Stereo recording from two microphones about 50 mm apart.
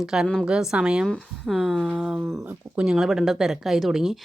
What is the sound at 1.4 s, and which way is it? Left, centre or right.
Speech, centre.